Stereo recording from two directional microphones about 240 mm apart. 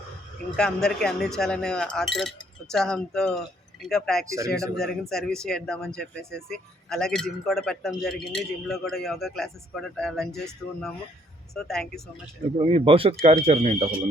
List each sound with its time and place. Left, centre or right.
0.5 s a man's voice: centre
4.3 s speech: centre
4.7 s a man's voice: centre
12.5 s speech: right